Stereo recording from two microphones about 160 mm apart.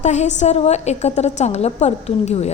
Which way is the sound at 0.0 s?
45° left (ahead or behind).